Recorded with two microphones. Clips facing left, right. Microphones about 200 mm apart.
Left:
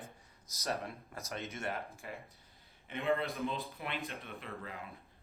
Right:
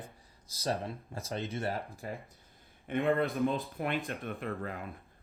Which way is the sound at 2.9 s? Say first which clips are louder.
Right 5 dB; 50° right (ahead or behind).